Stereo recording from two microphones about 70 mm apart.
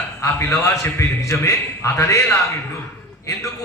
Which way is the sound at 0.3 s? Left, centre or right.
Left.